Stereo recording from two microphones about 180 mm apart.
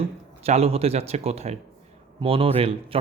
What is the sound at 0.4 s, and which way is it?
Speech, 35° right (ahead or behind).